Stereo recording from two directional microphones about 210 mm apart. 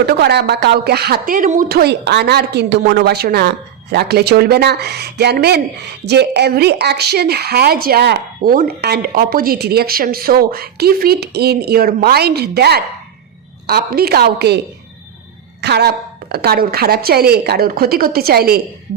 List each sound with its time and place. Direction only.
0.0 s speech: 50° right (ahead or behind)
15.6 s speech: 50° right (ahead or behind)